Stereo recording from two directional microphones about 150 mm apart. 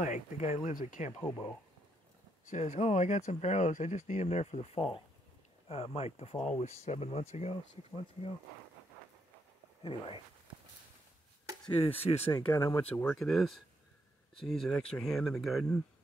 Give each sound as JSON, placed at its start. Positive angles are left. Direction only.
{"t": 0.0, "sound": "speech", "side_deg": 55}
{"t": 2.5, "sound": "speech", "side_deg": 55}
{"t": 9.8, "sound": "speech", "side_deg": 35}
{"t": 11.6, "sound": "speech", "side_deg": 40}
{"t": 12.5, "sound": "speech", "side_deg": 25}
{"t": 13.0, "sound": "speech", "side_deg": 5}